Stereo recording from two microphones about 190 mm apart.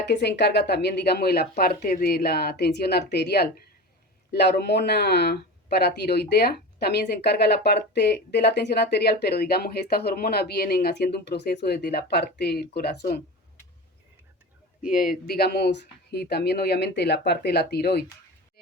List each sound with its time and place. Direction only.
0.0 s speech: 60° left (ahead or behind)
14.8 s speech: 45° left (ahead or behind)